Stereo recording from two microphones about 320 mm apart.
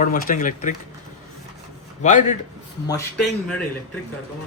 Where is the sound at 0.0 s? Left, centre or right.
Left.